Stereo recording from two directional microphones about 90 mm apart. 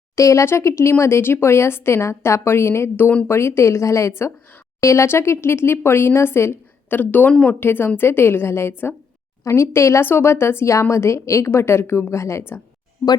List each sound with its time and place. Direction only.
0.2 s speech: 35° left (ahead or behind)
3.2 s a woman's voice: 30° left (ahead or behind)